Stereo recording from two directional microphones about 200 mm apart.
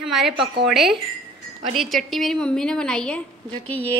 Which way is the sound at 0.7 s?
Centre (ahead or behind).